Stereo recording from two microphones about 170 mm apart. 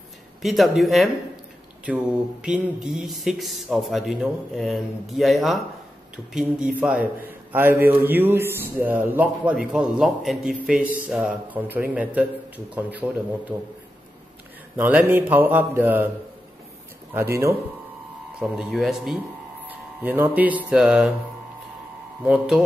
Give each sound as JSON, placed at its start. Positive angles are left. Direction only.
{"t": 0.4, "sound": "a man's voice", "side_deg": 0}
{"t": 2.4, "sound": "a man's voice", "side_deg": -5}
{"t": 14.8, "sound": "a man's voice", "side_deg": -10}
{"t": 17.1, "sound": "a man's voice", "side_deg": -15}
{"t": 18.4, "sound": "a man's voice", "side_deg": 0}
{"t": 22.2, "sound": "a man's voice", "side_deg": -10}